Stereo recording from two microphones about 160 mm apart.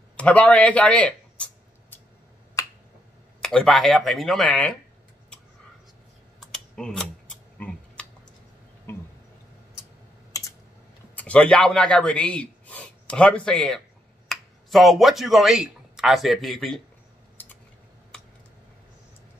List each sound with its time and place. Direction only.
0.2 s a sound: 10° left (ahead or behind)
2.6 s finger snapping: 20° left (ahead or behind)
3.4 s speech: centre (ahead or behind)
6.4 s typing: 5° left (ahead or behind)
8.9 s a sound: 15° left (ahead or behind)
10.3 s typing: 20° left (ahead or behind)
11.1 s a man's voice: 5° left (ahead or behind)